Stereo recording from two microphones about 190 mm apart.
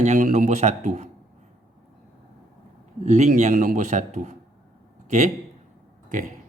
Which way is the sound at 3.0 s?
40° right (ahead or behind).